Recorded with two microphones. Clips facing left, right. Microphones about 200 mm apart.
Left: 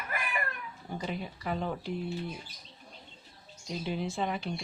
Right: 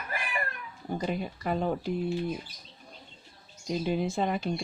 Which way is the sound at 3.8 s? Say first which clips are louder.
Right 4 dB; 45° right (ahead or behind).